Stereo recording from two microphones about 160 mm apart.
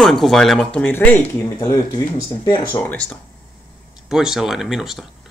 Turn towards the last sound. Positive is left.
turn(degrees=0)  # may be behind; listen again after turning